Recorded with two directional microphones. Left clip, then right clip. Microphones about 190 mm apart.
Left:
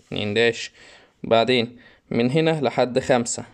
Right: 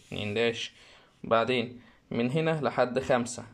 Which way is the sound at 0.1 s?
20° left (ahead or behind).